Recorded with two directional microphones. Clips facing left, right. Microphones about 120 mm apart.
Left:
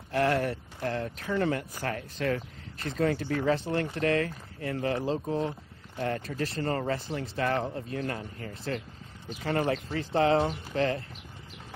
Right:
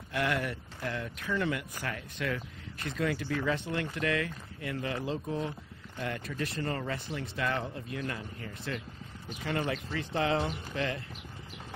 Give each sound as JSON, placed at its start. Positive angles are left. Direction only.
{"t": 0.1, "sound": "speech", "side_deg": 35}